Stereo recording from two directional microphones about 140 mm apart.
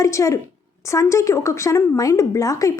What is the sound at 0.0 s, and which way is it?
A woman's voice, 20° left (ahead or behind).